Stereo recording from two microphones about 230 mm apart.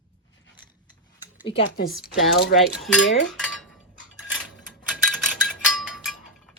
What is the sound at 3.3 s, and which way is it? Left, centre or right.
Dishes, centre.